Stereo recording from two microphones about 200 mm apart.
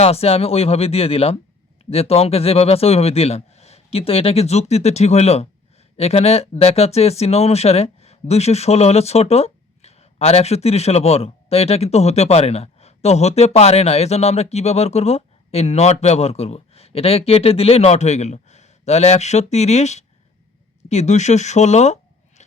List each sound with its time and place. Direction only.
0.0 s speech: 30° left (ahead or behind)